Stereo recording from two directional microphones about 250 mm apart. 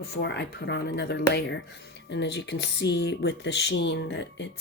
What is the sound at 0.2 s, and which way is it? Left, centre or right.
Speech, left.